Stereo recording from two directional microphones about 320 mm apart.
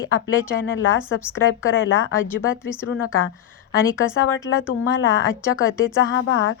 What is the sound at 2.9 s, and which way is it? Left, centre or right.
Speech, left.